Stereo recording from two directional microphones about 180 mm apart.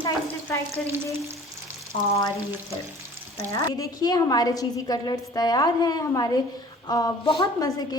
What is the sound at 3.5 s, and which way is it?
A woman's voice, 20° left (ahead or behind).